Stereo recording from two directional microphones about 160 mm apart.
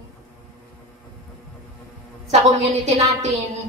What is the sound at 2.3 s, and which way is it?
Speech, 45° right (ahead or behind).